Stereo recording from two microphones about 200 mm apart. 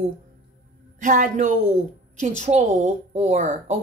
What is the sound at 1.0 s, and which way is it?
Speech, 40° right (ahead or behind).